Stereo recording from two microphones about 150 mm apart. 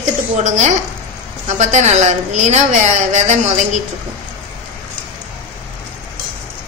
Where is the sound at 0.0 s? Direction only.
55° right (ahead or behind).